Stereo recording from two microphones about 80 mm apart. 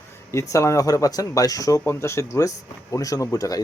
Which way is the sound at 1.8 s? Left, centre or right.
Left.